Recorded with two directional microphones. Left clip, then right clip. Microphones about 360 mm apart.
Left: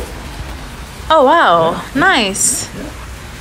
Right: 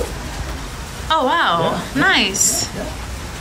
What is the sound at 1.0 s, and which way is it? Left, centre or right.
A woman's voice, centre.